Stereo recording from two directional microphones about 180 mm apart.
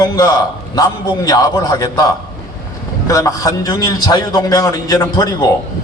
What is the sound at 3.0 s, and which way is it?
A man's voice, 20° left (ahead or behind).